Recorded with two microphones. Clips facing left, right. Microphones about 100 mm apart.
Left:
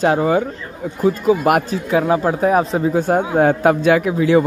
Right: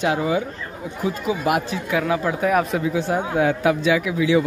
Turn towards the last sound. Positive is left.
turn(degrees=45)  # may be behind; listen again after turning